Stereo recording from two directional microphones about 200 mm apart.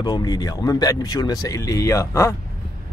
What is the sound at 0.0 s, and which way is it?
Speech, 20° left (ahead or behind).